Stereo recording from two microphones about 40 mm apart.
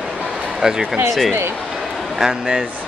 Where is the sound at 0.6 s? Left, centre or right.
Centre.